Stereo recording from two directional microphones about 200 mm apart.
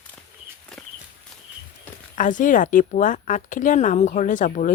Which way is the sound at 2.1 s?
40° left (ahead or behind).